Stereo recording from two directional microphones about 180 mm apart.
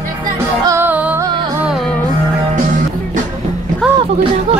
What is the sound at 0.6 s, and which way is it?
Music, 15° right (ahead or behind).